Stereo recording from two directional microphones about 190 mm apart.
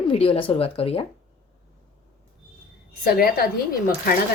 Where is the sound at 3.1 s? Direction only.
55° left (ahead or behind).